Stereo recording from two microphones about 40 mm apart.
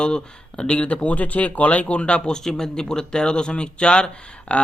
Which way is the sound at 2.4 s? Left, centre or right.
Centre.